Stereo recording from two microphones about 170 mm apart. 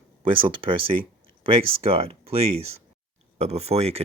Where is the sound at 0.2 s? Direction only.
30° right (ahead or behind).